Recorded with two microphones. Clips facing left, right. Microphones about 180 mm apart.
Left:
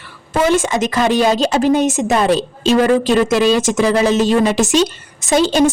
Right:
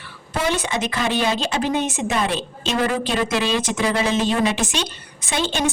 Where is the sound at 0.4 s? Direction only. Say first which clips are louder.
Left 8 dB; 45° left (ahead or behind).